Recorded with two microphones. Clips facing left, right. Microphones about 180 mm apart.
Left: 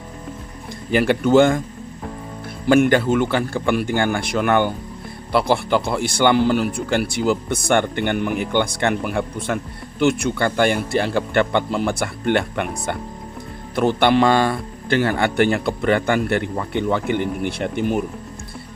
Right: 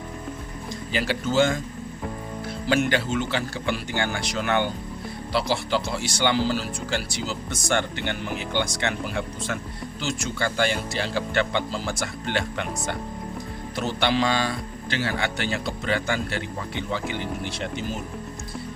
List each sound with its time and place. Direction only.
0.7 s speech: 55° left (ahead or behind)
2.6 s speech: 50° left (ahead or behind)